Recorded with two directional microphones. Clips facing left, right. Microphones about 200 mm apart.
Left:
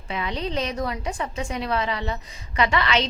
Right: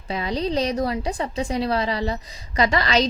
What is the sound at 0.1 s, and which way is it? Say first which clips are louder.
A woman's voice: right 4 dB; 35° right (ahead or behind).